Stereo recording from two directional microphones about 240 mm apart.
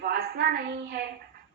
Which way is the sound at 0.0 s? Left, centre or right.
Right.